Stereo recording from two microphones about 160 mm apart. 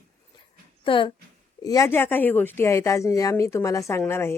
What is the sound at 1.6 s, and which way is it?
Speech, 20° left (ahead or behind).